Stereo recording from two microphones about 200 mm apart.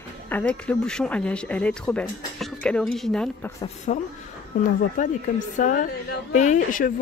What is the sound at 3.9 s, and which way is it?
A woman's voice, 30° left (ahead or behind).